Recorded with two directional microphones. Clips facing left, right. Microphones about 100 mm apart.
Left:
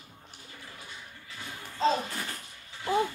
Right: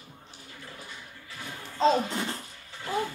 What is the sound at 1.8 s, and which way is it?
Speech, 20° right (ahead or behind).